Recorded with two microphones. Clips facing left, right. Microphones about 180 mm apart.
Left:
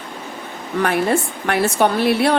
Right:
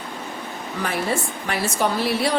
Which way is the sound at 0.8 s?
60° left (ahead or behind).